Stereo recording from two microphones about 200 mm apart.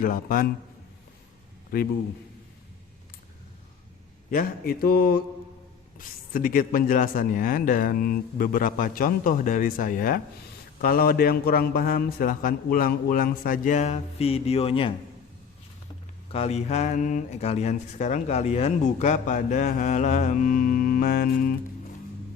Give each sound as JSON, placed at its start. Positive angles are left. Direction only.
{"t": 0.0, "sound": "speech", "side_deg": 45}
{"t": 4.3, "sound": "speech", "side_deg": 45}
{"t": 16.3, "sound": "speech", "side_deg": 30}